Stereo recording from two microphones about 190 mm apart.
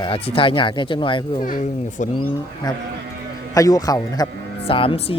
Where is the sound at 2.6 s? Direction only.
20° left (ahead or behind).